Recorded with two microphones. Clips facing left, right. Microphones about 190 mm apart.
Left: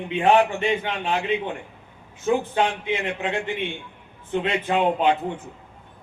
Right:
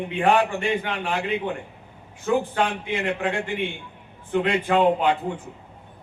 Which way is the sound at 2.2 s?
20° left (ahead or behind).